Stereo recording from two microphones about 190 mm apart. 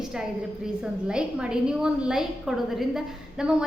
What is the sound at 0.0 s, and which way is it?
A woman's voice, 5° right (ahead or behind).